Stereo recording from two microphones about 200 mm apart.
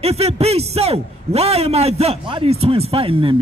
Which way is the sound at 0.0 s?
30° right (ahead or behind).